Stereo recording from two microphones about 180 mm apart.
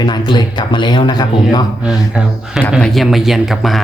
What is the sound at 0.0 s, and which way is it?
Speech, 25° left (ahead or behind).